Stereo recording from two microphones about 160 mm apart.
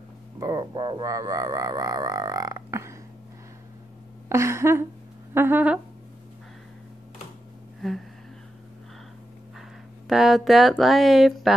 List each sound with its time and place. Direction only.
0.4 s music: 25° right (ahead or behind)
4.3 s a sound: 15° right (ahead or behind)
10.0 s speech: centre (ahead or behind)